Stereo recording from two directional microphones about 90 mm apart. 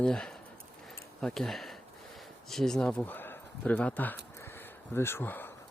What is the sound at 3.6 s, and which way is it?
Speech, 15° left (ahead or behind).